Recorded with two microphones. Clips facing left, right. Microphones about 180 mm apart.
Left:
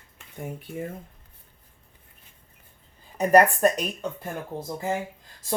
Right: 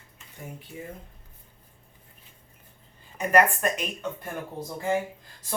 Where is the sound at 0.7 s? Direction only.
55° left (ahead or behind).